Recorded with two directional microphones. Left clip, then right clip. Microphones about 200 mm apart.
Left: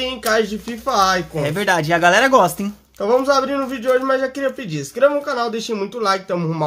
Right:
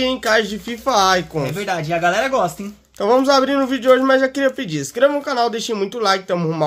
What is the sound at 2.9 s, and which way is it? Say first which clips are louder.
Speech: right 2 dB; 40° right (ahead or behind).